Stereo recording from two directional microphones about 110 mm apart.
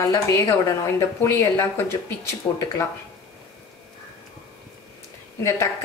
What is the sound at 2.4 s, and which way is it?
Speech, 40° left (ahead or behind).